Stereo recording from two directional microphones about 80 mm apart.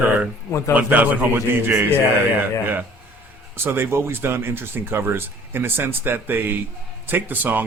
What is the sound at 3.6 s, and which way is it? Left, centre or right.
Speech, right.